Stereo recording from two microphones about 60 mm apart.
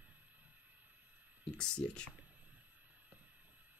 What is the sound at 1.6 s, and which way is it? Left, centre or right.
Speech, centre.